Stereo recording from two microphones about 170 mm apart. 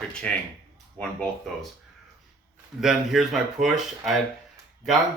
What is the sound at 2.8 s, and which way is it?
Speech, centre (ahead or behind).